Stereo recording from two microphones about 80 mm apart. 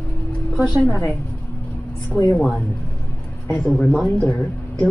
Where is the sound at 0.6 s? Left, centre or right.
Centre.